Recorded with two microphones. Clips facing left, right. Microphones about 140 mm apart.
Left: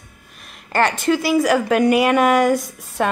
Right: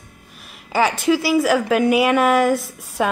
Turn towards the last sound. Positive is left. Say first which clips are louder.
# even
turn(degrees=-5)  # may be behind; listen again after turning